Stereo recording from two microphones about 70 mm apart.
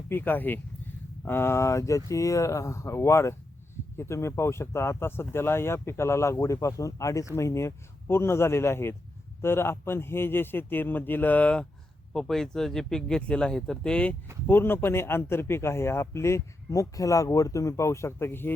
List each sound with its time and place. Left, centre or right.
0.1 s speech: left
12.1 s speech: centre
14.4 s speech: left